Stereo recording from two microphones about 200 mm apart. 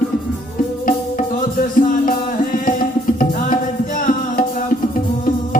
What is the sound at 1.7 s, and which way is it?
Music, 45° left (ahead or behind).